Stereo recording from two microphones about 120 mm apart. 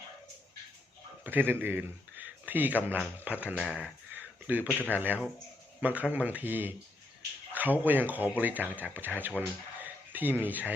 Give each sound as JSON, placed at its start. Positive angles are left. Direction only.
{"t": 1.2, "sound": "speech", "side_deg": -15}
{"t": 9.8, "sound": "a sound", "side_deg": -15}
{"t": 10.4, "sound": "speech", "side_deg": -15}